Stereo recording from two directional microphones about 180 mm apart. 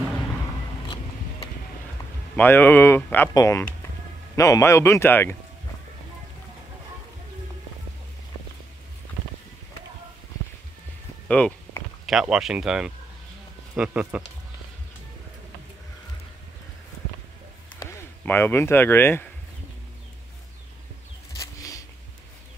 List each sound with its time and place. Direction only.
2.3 s speech: 10° left (ahead or behind)
11.2 s speech: 5° left (ahead or behind)
17.7 s speech: 10° left (ahead or behind)
21.4 s a sound: 20° left (ahead or behind)